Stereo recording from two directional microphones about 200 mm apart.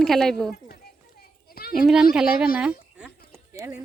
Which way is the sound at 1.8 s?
Centre (ahead or behind).